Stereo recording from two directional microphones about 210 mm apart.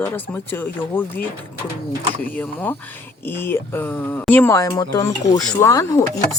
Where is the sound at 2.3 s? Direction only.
5° left (ahead or behind).